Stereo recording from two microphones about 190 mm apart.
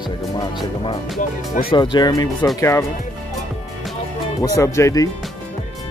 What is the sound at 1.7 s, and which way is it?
Speech, 25° left (ahead or behind).